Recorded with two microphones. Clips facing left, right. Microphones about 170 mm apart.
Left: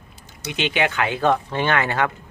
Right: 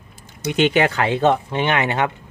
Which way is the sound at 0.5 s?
45° right (ahead or behind).